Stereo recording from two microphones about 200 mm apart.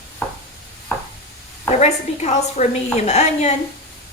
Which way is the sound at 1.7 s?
35° left (ahead or behind).